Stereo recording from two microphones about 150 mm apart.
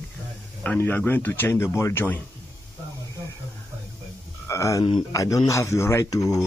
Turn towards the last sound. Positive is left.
turn(degrees=25)  # may be behind; listen again after turning